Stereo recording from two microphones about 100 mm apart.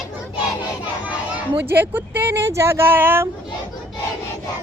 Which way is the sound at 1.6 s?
20° right (ahead or behind).